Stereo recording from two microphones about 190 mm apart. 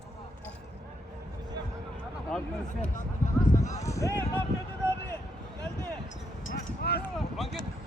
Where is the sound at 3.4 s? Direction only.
40° left (ahead or behind).